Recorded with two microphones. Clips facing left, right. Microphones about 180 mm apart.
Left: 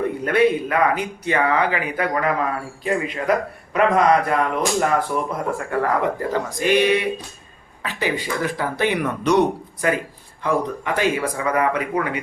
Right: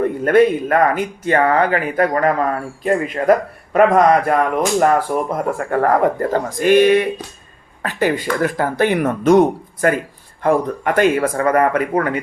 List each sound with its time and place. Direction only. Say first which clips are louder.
0.3 s speech: right 5 dB; 45° right (ahead or behind)